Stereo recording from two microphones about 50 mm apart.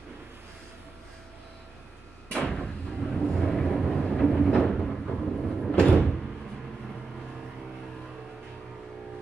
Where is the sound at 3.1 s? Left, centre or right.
Centre.